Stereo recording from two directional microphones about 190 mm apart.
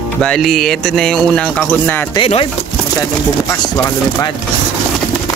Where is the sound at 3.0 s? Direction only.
15° left (ahead or behind).